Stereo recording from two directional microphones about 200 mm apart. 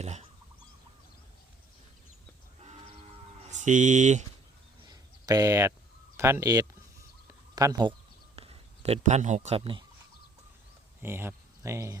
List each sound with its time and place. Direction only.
0.0 s bird: 30° right (ahead or behind)
3.5 s speech: 40° right (ahead or behind)
4.9 s a sound: 20° right (ahead or behind)
6.1 s speech: 15° right (ahead or behind)
8.4 s speech: 30° right (ahead or behind)
11.0 s speech: 10° right (ahead or behind)